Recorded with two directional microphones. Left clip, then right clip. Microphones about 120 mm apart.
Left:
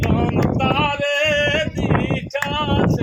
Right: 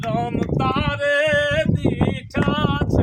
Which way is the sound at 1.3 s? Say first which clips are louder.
Left 1 dB; 40° right (ahead or behind).